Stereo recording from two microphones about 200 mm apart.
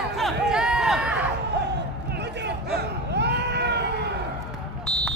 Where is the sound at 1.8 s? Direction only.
60° right (ahead or behind).